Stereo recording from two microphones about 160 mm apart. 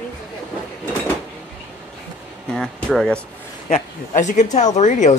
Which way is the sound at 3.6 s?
45° left (ahead or behind).